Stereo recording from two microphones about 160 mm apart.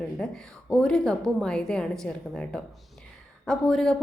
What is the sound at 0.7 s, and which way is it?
A woman's voice, 5° left (ahead or behind).